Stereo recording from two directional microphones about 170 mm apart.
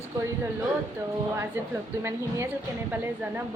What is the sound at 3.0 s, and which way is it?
Speech, 10° right (ahead or behind).